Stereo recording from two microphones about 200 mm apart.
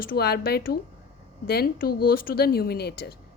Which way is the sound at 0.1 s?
50° left (ahead or behind).